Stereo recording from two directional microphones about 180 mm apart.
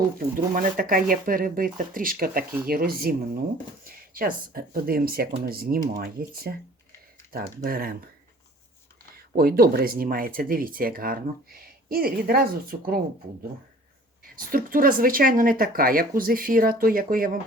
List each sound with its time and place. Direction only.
0.2 s speech: 50° right (ahead or behind)
9.1 s speech: 55° right (ahead or behind)
14.3 s speech: 50° right (ahead or behind)